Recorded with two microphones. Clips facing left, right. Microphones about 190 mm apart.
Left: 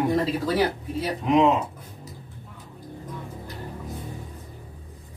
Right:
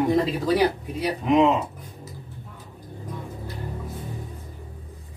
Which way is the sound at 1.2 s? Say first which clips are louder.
Right 1 dB; centre (ahead or behind).